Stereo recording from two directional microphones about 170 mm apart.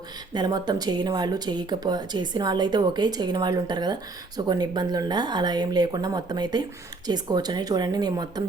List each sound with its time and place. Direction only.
0.3 s speech: 25° right (ahead or behind)